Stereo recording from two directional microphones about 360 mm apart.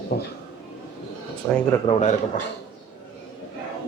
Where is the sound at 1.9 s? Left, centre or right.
Centre.